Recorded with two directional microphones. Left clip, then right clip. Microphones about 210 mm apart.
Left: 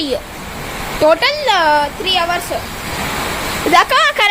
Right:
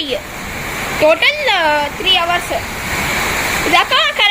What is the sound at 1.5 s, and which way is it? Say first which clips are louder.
Speech: left 1 dB; 10° left (ahead or behind).